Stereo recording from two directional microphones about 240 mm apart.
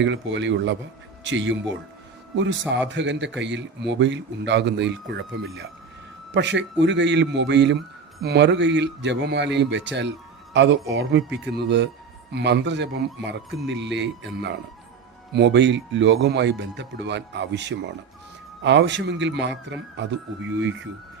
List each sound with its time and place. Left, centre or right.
0.0 s speech: right